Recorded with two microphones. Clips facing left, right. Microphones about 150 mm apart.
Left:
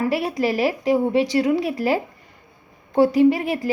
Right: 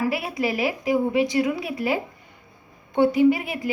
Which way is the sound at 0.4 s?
35° left (ahead or behind).